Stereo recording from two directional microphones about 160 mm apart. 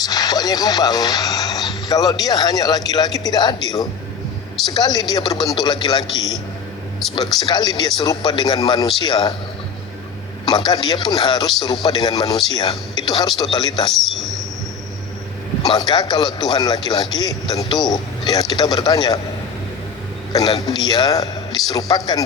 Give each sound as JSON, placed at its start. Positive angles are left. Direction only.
{"t": 0.0, "sound": "speech", "side_deg": 25}
{"t": 4.7, "sound": "speech", "side_deg": 25}
{"t": 7.0, "sound": "speech", "side_deg": 0}
{"t": 7.5, "sound": "speech", "side_deg": 25}
{"t": 10.4, "sound": "speech", "side_deg": 25}
{"t": 13.9, "sound": "a sound", "side_deg": 0}
{"t": 15.9, "sound": "speech", "side_deg": 25}
{"t": 20.3, "sound": "a man's voice", "side_deg": 25}